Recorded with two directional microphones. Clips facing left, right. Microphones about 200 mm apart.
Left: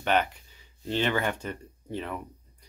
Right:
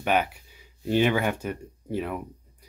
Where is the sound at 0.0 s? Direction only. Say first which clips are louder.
Right 1 dB; 10° right (ahead or behind).